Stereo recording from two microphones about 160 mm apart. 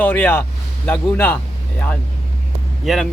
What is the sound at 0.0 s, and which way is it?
Speech, 10° left (ahead or behind).